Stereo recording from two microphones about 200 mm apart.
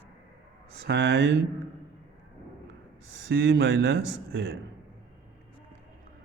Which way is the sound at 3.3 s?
60° right (ahead or behind).